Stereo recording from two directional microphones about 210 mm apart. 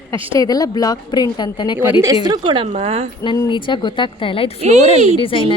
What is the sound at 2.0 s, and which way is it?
A woman's voice, 15° right (ahead or behind).